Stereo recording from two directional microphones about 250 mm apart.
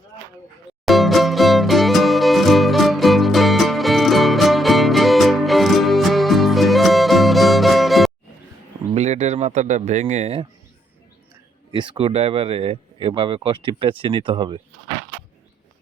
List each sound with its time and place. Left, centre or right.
0.9 s music: centre
9.0 s speech: right
11.7 s speech: centre